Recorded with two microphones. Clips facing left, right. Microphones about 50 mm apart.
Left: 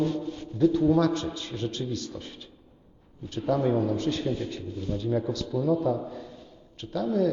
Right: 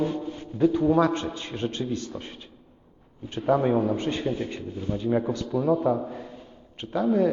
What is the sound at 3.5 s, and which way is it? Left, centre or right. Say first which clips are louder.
A man's voice: right 3 dB; right.